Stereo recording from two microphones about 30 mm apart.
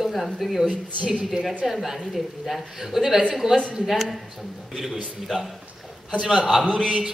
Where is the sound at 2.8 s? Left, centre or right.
Centre.